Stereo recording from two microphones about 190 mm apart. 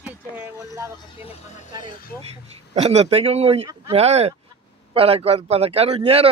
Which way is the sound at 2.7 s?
35° right (ahead or behind).